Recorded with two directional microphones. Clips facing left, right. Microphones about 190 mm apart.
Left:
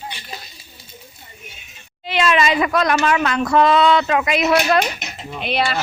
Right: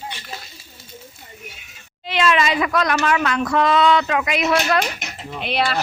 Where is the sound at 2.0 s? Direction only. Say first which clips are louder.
Left 1 dB; 10° left (ahead or behind).